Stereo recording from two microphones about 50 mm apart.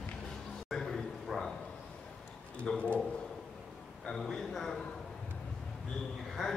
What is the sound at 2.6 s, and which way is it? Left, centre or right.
Speech, left.